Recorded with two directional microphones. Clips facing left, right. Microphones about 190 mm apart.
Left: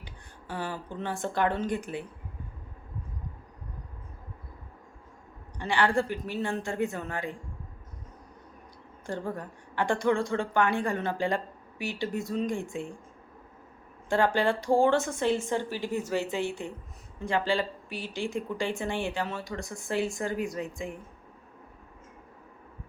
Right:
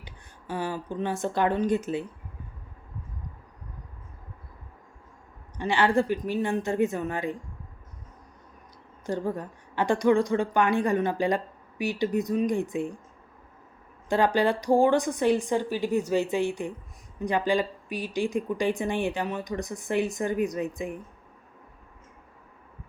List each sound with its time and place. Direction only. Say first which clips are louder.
0.0 s a woman's voice: right 1 dB; 15° right (ahead or behind)
5.5 s a woman's voice: right 3 dB; 20° right (ahead or behind)
9.0 s a woman's voice: right 4 dB; 15° right (ahead or behind)
14.1 s speech: right 2 dB; 20° right (ahead or behind)